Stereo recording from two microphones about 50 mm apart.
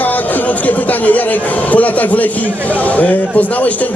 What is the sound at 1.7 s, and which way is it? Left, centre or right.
Speech, left.